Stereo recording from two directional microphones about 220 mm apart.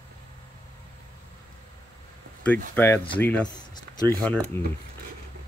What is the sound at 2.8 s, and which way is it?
Speech, 10° left (ahead or behind).